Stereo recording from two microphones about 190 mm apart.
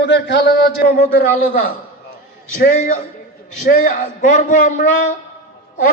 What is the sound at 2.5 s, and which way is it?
A man's voice, 45° left (ahead or behind).